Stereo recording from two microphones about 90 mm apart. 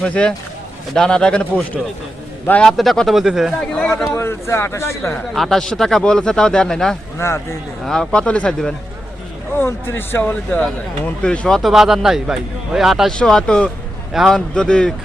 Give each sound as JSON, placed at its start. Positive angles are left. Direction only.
{"t": 0.0, "sound": "speech", "side_deg": 10}
{"t": 2.5, "sound": "speech", "side_deg": 10}
{"t": 3.6, "sound": "speech", "side_deg": 10}
{"t": 4.1, "sound": "speech", "side_deg": 30}
{"t": 5.1, "sound": "speech", "side_deg": 0}
{"t": 7.2, "sound": "speech", "side_deg": 30}
{"t": 7.9, "sound": "speech", "side_deg": 10}
{"t": 9.6, "sound": "speech", "side_deg": 25}
{"t": 10.6, "sound": "speech", "side_deg": 10}
{"t": 13.1, "sound": "speech", "side_deg": 5}
{"t": 14.1, "sound": "speech", "side_deg": -5}
{"t": 14.3, "sound": "speech", "side_deg": 10}